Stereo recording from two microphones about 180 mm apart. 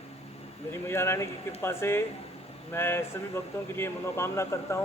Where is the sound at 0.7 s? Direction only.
15° left (ahead or behind).